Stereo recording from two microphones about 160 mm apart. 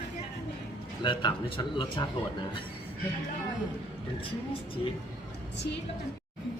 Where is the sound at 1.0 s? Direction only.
30° left (ahead or behind).